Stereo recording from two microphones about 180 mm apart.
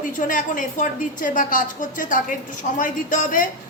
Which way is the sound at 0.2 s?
50° left (ahead or behind).